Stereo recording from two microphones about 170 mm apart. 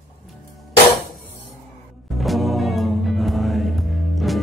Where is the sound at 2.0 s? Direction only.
Centre (ahead or behind).